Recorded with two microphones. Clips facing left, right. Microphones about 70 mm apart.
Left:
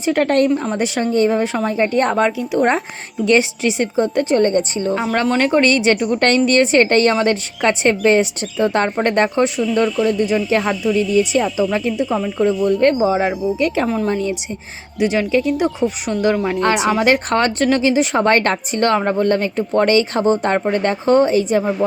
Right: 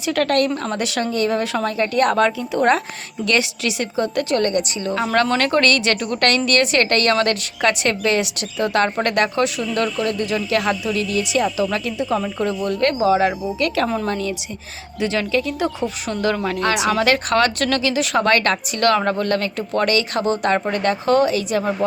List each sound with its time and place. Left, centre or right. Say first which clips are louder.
0.0 s a woman's voice: left 3 dB; left
0.5 s speech: left 5 dB; centre
1.1 s a woman's voice: left 5 dB; left
2.1 s speech: left 2 dB; centre
3.2 s a woman's voice: left 5 dB; left
12.0 s speech: left 2 dB; centre
13.8 s a woman's voice: left 3 dB; centre
14.9 s speech: left 4 dB; centre
16.6 s a woman's voice: left 3 dB; left